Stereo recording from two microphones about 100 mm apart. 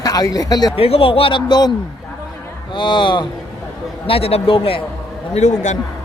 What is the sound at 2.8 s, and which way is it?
Speech, 50° left (ahead or behind).